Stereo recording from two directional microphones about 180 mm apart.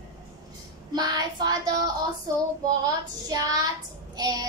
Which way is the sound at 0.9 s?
25° right (ahead or behind).